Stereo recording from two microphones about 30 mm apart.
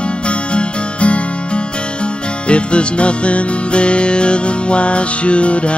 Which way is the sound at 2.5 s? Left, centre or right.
Left.